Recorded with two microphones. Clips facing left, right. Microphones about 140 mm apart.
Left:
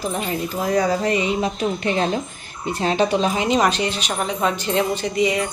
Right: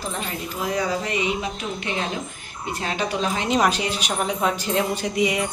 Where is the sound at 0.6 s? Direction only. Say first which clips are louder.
Left 5 dB; 45° left (ahead or behind); by 3.2 s 25° left (ahead or behind).